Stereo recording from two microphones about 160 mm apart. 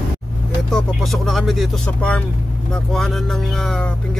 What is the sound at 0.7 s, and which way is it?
Speech, centre (ahead or behind).